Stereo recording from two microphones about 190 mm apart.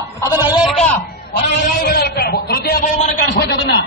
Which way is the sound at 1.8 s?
55° left (ahead or behind).